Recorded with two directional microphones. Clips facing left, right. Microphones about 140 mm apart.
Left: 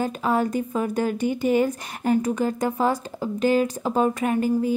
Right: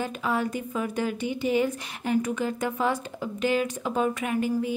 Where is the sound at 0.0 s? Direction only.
40° left (ahead or behind).